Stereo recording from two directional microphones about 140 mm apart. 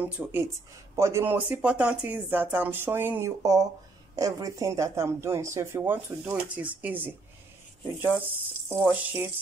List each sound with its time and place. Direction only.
0.0 s speech: 15° right (ahead or behind)
8.6 s speech: 15° right (ahead or behind)